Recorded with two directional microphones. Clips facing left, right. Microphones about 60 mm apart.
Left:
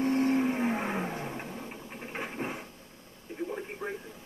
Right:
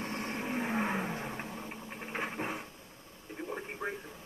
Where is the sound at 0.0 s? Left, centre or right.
Left.